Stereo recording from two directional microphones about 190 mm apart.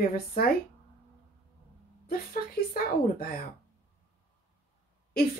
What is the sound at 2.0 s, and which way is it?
Speech, 50° left (ahead or behind).